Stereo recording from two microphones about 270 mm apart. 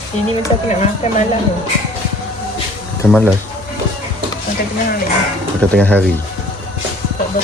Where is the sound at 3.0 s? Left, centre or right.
Centre.